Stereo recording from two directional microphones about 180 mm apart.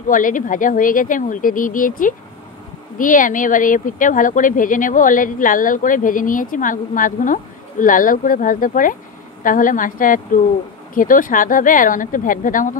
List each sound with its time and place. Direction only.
0.1 s speech: 45° left (ahead or behind)